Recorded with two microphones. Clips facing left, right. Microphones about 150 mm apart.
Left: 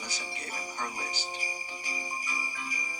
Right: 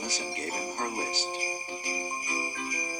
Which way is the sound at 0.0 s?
45° right (ahead or behind).